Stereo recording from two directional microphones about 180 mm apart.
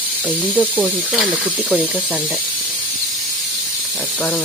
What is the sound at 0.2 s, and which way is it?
Speech, 5° right (ahead or behind).